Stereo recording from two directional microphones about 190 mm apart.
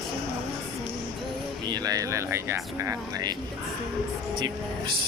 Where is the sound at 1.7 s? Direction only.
20° right (ahead or behind).